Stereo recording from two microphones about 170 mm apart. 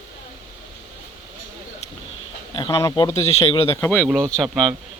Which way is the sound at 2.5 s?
25° left (ahead or behind).